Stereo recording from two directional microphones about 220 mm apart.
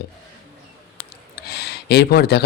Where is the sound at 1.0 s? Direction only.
45° left (ahead or behind).